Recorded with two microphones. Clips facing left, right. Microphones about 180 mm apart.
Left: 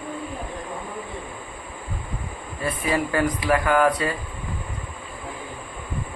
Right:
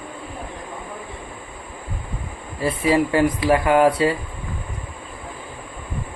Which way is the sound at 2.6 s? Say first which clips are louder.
Right 6 dB; 25° right (ahead or behind).